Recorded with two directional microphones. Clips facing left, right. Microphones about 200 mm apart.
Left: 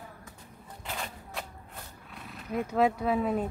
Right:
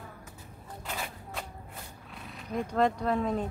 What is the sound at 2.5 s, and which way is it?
Speech, 5° left (ahead or behind).